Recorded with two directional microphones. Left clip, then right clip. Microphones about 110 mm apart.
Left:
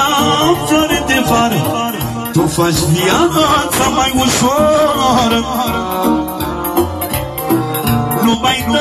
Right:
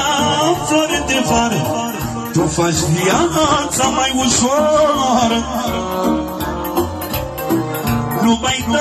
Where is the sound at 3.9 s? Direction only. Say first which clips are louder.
Left 3 dB; 20° left (ahead or behind).